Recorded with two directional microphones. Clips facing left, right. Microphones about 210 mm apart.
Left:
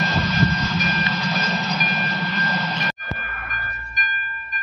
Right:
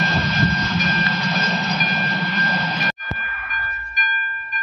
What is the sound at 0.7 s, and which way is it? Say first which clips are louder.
Music: right 1 dB; 10° left (ahead or behind).